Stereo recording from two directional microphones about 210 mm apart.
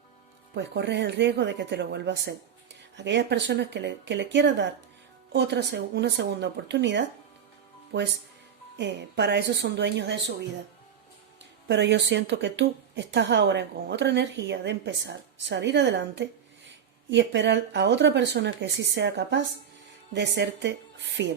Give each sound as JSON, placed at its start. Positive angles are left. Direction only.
{"t": 0.5, "sound": "a woman's voice", "side_deg": -55}
{"t": 8.8, "sound": "a woman's voice", "side_deg": -55}
{"t": 11.7, "sound": "a woman's voice", "side_deg": -55}